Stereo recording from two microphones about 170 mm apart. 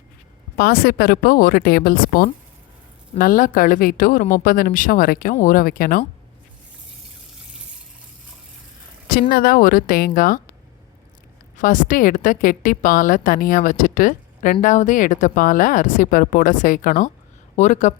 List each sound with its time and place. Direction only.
0.5 s a woman's voice: 65° left (ahead or behind)
9.3 s a woman's voice: 60° left (ahead or behind)
11.5 s a woman's voice: 50° left (ahead or behind)